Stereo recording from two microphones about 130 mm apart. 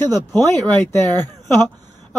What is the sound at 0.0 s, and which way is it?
Speech, 15° left (ahead or behind).